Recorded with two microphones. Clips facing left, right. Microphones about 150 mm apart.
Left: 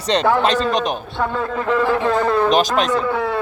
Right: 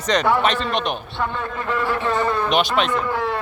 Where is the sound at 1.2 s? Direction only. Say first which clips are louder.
Left 6 dB; 90° left.